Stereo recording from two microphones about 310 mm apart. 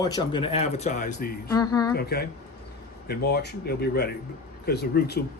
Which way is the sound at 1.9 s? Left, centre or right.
Left.